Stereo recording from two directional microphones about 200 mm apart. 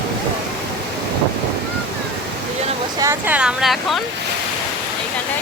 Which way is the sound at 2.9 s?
15° right (ahead or behind).